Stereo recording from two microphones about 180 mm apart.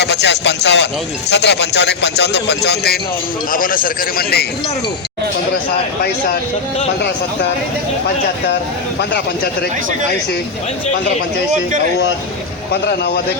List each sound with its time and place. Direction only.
0.0 s a man's voice: 70° left (ahead or behind)
3.5 s a man's voice: 50° left (ahead or behind)
9.0 s a man's voice: 70° left (ahead or behind)
12.7 s speech: 65° left (ahead or behind)